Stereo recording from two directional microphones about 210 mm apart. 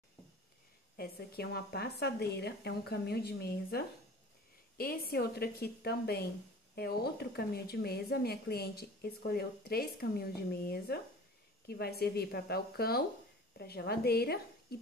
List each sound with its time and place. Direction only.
0.9 s a woman's voice: 45° left (ahead or behind)